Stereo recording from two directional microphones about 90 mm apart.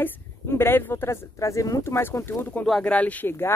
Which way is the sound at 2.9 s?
15° left (ahead or behind).